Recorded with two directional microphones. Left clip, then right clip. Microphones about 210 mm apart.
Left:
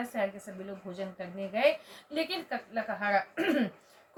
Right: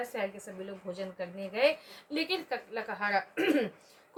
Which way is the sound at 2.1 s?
50° right (ahead or behind).